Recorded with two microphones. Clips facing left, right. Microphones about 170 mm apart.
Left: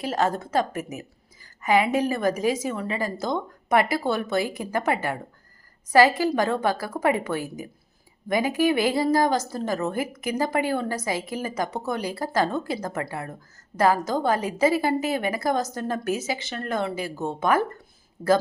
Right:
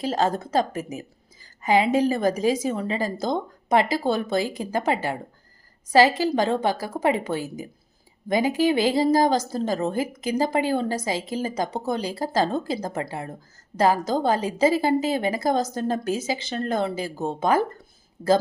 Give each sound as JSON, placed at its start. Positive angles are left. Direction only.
{"t": 0.0, "sound": "a woman's voice", "side_deg": -35}